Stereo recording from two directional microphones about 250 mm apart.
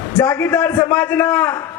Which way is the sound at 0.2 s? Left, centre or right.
Centre.